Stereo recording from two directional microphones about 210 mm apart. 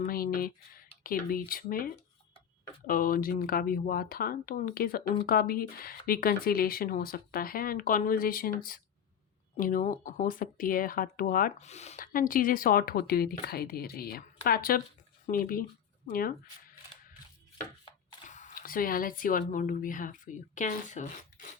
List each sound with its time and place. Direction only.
0.0 s speech: 45° left (ahead or behind)
17.8 s speech: 35° left (ahead or behind)